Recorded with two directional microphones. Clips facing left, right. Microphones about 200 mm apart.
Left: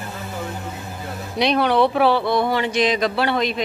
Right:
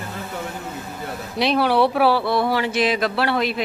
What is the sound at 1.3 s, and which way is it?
Speech, 5° right (ahead or behind).